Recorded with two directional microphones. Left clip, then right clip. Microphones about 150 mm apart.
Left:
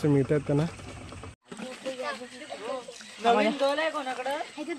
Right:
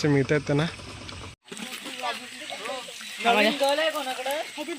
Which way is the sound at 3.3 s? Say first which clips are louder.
Right 2 dB; 40° right (ahead or behind).